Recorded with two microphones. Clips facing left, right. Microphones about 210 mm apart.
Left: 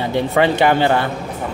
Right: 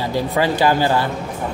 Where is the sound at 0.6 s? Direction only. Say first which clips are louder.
Left 2 dB; 60° left (ahead or behind).